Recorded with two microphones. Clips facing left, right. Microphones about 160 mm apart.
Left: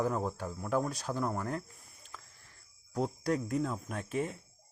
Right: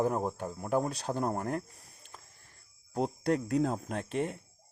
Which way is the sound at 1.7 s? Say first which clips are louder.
Right 1 dB; 75° right (ahead or behind).